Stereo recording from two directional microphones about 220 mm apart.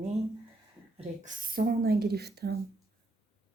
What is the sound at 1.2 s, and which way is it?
Speech, 40° right (ahead or behind).